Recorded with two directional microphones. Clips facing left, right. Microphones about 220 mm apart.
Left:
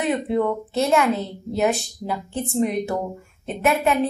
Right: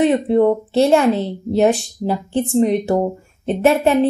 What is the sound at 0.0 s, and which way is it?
Speech, 30° right (ahead or behind).